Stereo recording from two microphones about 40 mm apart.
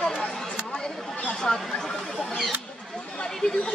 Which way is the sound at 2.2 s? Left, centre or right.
Centre.